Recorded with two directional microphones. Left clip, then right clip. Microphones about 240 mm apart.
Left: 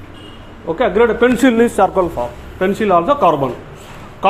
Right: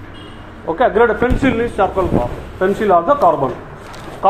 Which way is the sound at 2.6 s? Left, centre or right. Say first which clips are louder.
Even; left.